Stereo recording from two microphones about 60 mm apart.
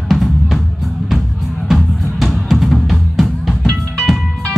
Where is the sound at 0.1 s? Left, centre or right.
Centre.